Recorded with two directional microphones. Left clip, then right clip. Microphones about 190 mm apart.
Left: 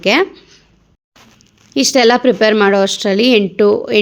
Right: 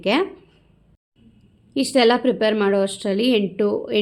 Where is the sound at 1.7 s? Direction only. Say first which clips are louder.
Left 6 dB; 25° left (ahead or behind).